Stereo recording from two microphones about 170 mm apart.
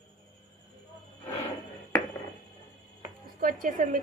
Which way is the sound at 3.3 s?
55° right (ahead or behind).